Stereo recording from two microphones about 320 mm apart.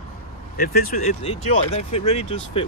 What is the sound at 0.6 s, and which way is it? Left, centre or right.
Speech, left.